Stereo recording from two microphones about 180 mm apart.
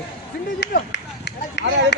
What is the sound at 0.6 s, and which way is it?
Run, 70° left (ahead or behind).